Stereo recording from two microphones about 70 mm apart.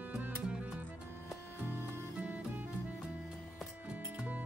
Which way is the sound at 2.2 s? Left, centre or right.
Right.